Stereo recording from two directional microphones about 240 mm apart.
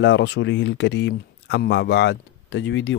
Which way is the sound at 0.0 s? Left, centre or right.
Left.